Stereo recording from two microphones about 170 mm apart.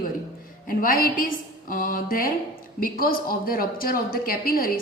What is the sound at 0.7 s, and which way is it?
A woman's voice, 60° left (ahead or behind).